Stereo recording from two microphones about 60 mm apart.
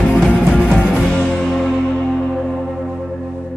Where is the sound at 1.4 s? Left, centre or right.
Centre.